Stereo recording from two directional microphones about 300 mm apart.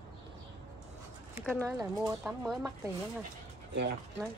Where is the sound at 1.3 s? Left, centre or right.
Centre.